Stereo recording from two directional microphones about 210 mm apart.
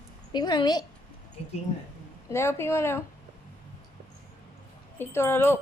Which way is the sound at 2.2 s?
10° left (ahead or behind).